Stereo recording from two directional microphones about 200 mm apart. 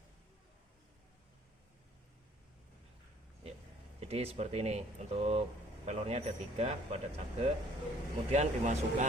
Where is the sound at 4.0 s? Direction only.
30° right (ahead or behind).